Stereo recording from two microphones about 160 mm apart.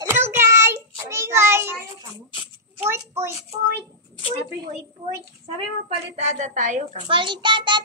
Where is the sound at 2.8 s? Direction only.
15° right (ahead or behind).